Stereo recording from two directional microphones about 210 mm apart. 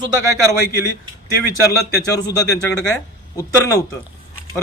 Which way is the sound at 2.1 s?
15° left (ahead or behind).